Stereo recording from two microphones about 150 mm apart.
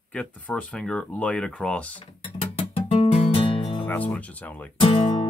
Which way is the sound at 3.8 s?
10° left (ahead or behind).